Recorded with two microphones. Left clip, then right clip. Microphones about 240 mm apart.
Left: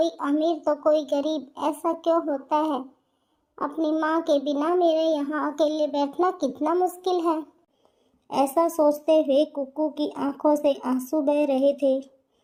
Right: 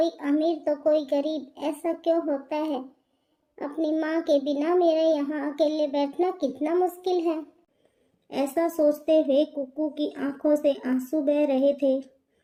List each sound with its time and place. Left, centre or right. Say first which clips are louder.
0.0 s a child's voice: left 1 dB; centre